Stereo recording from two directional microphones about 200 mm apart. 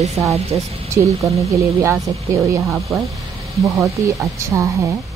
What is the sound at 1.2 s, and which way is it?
Speech, 15° right (ahead or behind).